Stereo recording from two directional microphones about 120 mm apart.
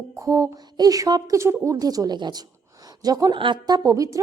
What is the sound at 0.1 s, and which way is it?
Speech, 25° right (ahead or behind).